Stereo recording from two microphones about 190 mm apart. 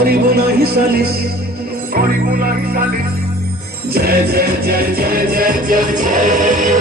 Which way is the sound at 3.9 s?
55° right (ahead or behind).